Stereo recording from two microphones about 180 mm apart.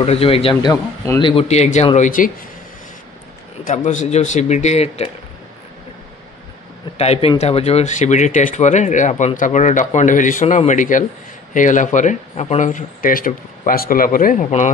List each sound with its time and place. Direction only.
0.0 s speech: 35° left (ahead or behind)
1.2 s speech: 35° left (ahead or behind)
3.6 s speech: 45° left (ahead or behind)
7.0 s speech: 35° left (ahead or behind)